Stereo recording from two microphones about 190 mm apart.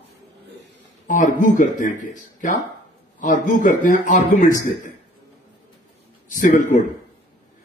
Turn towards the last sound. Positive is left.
turn(degrees=45)  # may be behind; listen again after turning